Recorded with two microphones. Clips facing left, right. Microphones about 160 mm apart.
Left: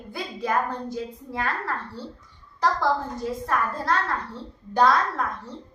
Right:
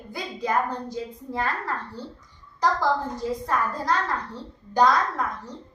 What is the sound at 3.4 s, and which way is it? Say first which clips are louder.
A woman's voice: left 1 dB; 20° right (ahead or behind).